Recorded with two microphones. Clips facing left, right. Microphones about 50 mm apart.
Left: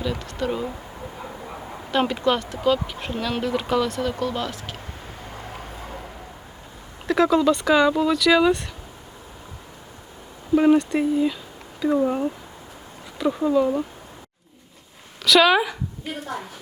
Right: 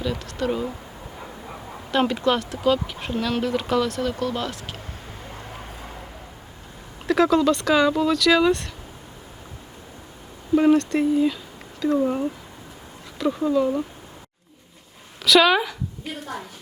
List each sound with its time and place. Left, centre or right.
0.0 s speech: centre
7.1 s speech: centre
10.5 s speech: centre
15.2 s speech: centre